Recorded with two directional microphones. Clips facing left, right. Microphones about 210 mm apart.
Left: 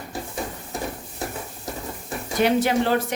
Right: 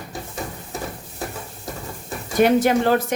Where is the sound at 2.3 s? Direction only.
50° right (ahead or behind).